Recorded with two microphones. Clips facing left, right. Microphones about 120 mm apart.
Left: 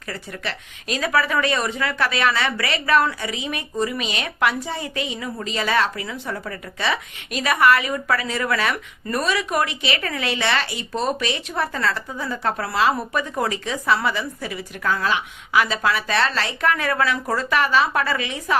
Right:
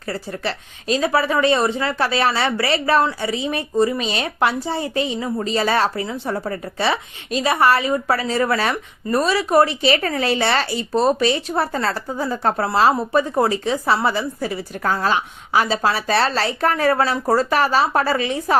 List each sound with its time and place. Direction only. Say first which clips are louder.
0.1 s a woman's voice: right 5 dB; 30° right (ahead or behind)